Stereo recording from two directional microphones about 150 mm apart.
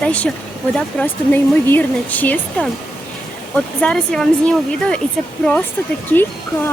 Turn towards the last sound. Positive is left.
turn(degrees=15)  # may be behind; listen again after turning